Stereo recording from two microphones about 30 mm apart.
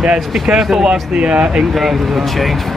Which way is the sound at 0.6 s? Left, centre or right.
Centre.